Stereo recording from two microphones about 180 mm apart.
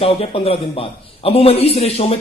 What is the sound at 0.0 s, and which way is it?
A man's voice, 30° left (ahead or behind).